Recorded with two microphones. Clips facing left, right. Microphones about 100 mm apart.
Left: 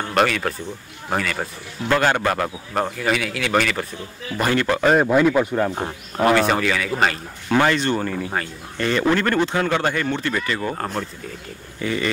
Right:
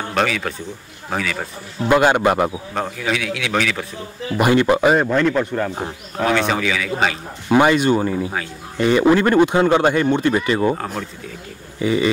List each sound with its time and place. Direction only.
0.1 s speech: centre (ahead or behind)
1.9 s speech: 15° right (ahead or behind)
2.7 s speech: centre (ahead or behind)
4.4 s speech: 15° right (ahead or behind)
4.9 s speech: 5° left (ahead or behind)
7.4 s speech: 15° right (ahead or behind)
10.8 s speech: centre (ahead or behind)
11.8 s speech: 15° right (ahead or behind)